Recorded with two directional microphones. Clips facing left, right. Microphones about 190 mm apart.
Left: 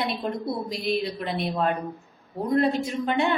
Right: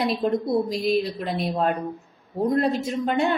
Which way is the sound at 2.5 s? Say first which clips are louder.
Left 3 dB; 40° right (ahead or behind).